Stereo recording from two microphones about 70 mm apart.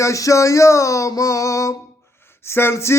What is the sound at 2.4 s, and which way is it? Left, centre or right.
Speech, left.